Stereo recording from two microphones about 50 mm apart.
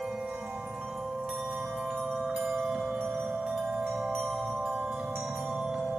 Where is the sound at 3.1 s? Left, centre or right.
Centre.